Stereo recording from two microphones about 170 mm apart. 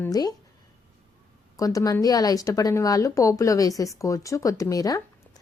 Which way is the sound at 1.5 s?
20° left (ahead or behind).